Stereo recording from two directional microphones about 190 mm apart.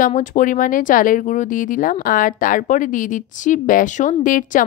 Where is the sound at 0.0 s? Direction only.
45° left (ahead or behind).